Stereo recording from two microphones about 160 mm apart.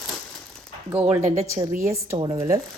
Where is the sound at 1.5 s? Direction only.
60° right (ahead or behind).